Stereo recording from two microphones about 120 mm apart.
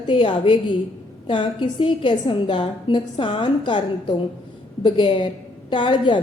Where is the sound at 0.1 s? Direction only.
45° left (ahead or behind).